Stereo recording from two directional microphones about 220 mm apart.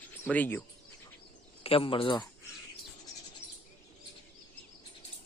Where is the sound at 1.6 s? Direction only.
25° left (ahead or behind).